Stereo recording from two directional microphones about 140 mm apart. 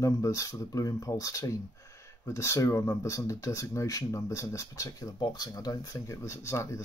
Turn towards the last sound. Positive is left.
turn(degrees=20)  # may be behind; listen again after turning